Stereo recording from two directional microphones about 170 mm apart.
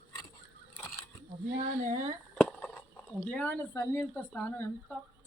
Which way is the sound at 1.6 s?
45° right (ahead or behind).